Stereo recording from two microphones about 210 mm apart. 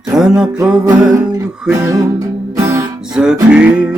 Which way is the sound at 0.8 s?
15° right (ahead or behind).